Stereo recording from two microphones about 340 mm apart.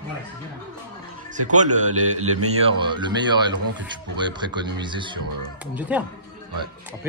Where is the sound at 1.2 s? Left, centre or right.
Right.